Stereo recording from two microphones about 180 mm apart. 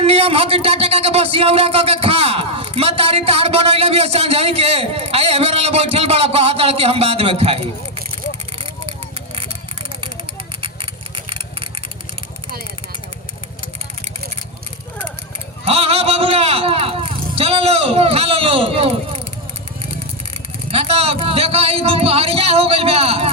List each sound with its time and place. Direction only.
0.0 s speech: 35° right (ahead or behind)
8.5 s vehicle: 30° right (ahead or behind)
11.3 s vehicle: 30° right (ahead or behind)
15.6 s speech: 35° right (ahead or behind)
20.7 s speech: 30° right (ahead or behind)